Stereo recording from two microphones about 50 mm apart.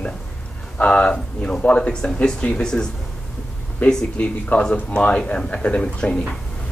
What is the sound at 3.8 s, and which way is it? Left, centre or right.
Speech, left.